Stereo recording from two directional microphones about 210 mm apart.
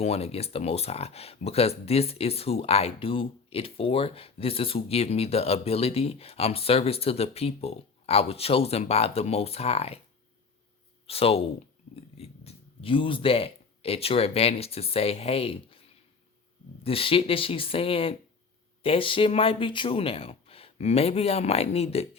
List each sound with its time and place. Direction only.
0.0 s speech: 30° left (ahead or behind)
11.0 s speech: 30° left (ahead or behind)
16.8 s speech: 25° left (ahead or behind)